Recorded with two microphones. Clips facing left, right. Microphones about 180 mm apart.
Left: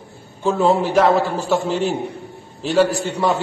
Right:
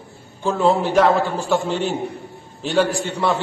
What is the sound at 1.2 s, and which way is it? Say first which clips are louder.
Speech: left 2 dB; 35° left (ahead or behind).